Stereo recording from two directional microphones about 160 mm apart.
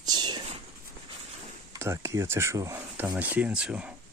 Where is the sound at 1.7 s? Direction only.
20° right (ahead or behind).